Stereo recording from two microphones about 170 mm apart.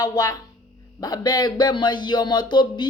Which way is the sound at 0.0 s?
20° left (ahead or behind).